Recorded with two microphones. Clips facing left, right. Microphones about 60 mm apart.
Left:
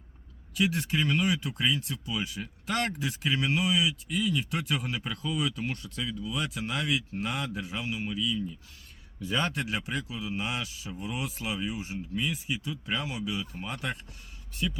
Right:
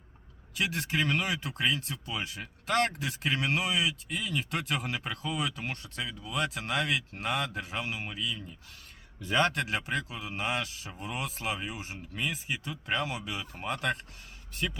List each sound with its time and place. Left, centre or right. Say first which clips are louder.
0.5 s speech: left 3 dB; right
9.2 s speech: right 3 dB; right
9.5 s speech: right 1 dB; right
12.1 s speech: left 1 dB; right